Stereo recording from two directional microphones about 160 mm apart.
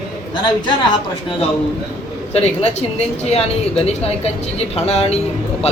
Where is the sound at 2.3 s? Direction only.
40° left (ahead or behind).